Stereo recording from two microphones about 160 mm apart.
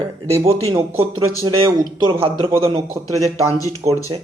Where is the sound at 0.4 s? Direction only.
40° right (ahead or behind).